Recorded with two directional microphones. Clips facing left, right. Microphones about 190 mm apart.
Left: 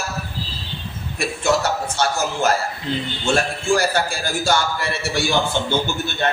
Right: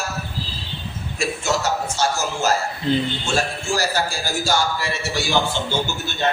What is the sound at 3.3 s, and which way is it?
A man's voice, 55° left (ahead or behind).